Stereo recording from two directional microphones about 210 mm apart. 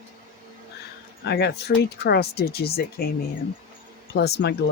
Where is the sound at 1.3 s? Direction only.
50° left (ahead or behind).